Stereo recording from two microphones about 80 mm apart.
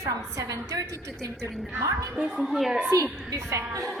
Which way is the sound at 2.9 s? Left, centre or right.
Right.